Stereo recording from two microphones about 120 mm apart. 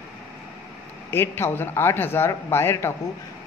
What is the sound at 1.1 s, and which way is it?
A man's voice, 20° left (ahead or behind).